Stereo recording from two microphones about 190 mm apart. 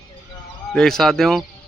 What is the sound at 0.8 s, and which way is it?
Speech, centre (ahead or behind).